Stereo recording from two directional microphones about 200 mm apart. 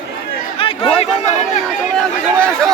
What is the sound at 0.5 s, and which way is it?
Chatter, 25° left (ahead or behind).